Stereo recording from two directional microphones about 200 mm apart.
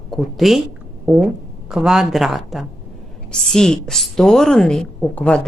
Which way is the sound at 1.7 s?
5° right (ahead or behind).